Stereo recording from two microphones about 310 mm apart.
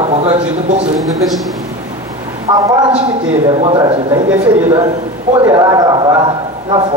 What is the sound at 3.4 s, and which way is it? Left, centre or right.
A man's voice, centre.